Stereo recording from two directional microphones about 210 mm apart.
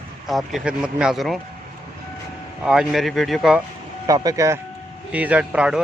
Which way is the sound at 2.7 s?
Centre (ahead or behind).